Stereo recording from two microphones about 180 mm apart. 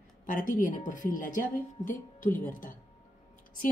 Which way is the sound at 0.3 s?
45° left (ahead or behind).